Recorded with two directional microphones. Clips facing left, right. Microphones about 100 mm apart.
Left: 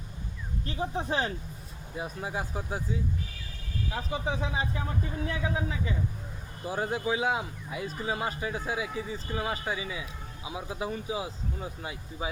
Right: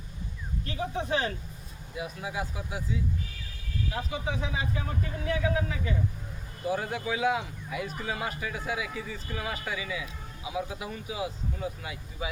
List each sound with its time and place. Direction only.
0.6 s speech: 35° left (ahead or behind)
4.1 s speech: 35° left (ahead or behind)